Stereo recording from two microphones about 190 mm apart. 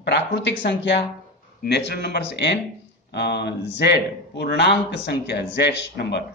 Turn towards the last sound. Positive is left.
turn(degrees=60)  # may be behind; listen again after turning